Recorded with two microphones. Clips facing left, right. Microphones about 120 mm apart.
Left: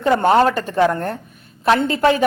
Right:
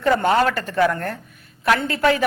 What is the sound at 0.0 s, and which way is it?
A man's voice, 25° left (ahead or behind).